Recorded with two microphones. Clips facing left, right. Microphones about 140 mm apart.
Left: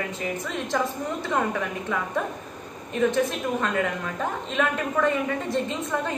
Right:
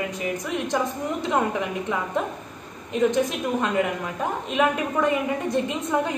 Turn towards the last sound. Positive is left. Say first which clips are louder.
# right 3 dB
turn(degrees=-15)  # may be behind; listen again after turning